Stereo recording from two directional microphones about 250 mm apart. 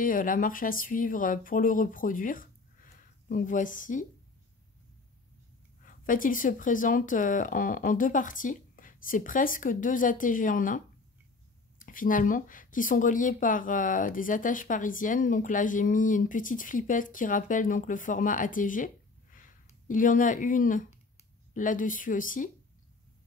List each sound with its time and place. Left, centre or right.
0.0 s speech: left
5.8 s speech: left
11.8 s speech: left